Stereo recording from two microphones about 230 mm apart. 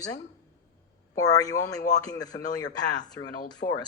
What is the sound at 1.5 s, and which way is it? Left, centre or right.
Speech, left.